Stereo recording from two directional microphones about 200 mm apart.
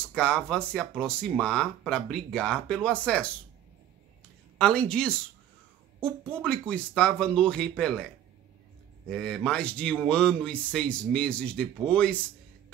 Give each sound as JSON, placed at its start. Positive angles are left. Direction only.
{"t": 0.0, "sound": "speech", "side_deg": 5}
{"t": 4.6, "sound": "speech", "side_deg": 5}
{"t": 6.3, "sound": "speech", "side_deg": 5}
{"t": 9.1, "sound": "speech", "side_deg": 5}